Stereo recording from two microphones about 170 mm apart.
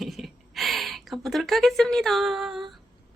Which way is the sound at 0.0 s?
Centre (ahead or behind).